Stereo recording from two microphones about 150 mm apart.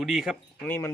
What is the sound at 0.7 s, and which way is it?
Speech, 15° left (ahead or behind).